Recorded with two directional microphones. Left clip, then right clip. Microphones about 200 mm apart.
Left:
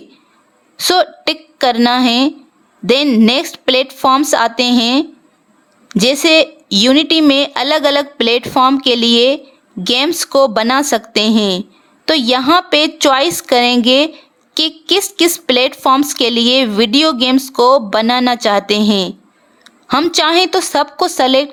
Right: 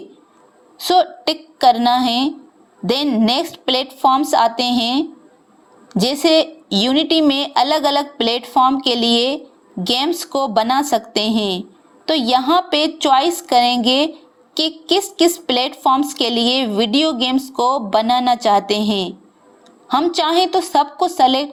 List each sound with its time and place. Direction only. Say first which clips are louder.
0.8 s a woman's voice: left 2 dB; 30° left (ahead or behind)